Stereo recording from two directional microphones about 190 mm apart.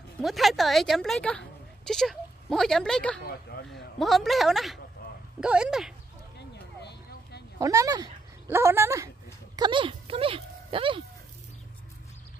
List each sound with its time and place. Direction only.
0.2 s a woman's voice: centre (ahead or behind)
3.3 s speech: 55° left (ahead or behind)
4.0 s a woman's voice: centre (ahead or behind)
6.3 s a sound: 60° left (ahead or behind)
7.5 s speech: 15° right (ahead or behind)
9.6 s speech: 25° right (ahead or behind)